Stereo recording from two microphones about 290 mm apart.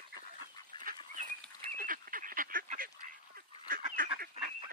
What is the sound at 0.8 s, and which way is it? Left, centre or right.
Goose, right.